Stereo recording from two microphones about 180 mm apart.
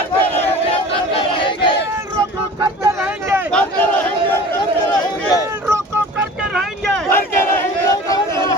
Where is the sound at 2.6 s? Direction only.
15° right (ahead or behind).